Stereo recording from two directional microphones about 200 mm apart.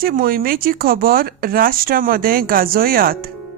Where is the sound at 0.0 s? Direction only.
45° right (ahead or behind).